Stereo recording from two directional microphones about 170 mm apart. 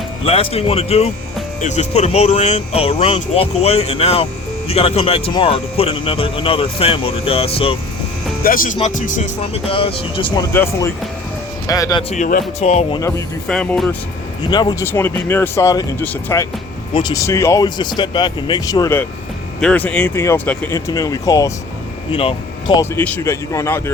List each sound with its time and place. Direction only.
0.3 s speech: 35° left (ahead or behind)
8.4 s speech: 55° left (ahead or behind)
9.6 s speech: 30° left (ahead or behind)
10.5 s speech: 15° left (ahead or behind)
12.1 s speech: 45° left (ahead or behind)
13.0 s speech: 20° left (ahead or behind)
13.5 s speech: 5° left (ahead or behind)
14.5 s speech: 25° left (ahead or behind)
14.8 s speech: 10° left (ahead or behind)
16.9 s speech: 25° left (ahead or behind)
19.5 s speech: 5° left (ahead or behind)
22.1 s speech: 30° left (ahead or behind)
23.0 s speech: 10° left (ahead or behind)